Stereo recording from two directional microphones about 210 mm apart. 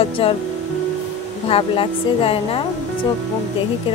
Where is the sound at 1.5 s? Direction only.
25° left (ahead or behind).